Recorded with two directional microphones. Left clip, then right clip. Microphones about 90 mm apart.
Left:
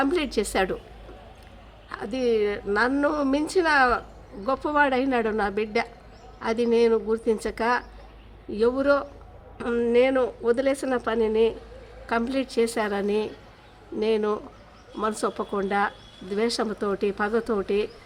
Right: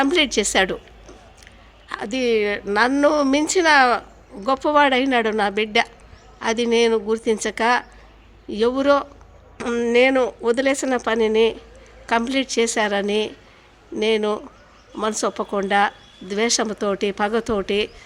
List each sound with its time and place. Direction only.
0.0 s a woman's voice: 45° right (ahead or behind)
1.9 s a woman's voice: 50° right (ahead or behind)
5.0 s a woman's voice: 40° right (ahead or behind)
9.9 s speech: 70° right (ahead or behind)
12.0 s a woman's voice: 40° right (ahead or behind)